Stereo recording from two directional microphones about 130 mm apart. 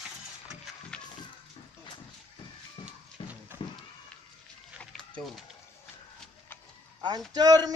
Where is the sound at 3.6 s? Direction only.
45° left (ahead or behind).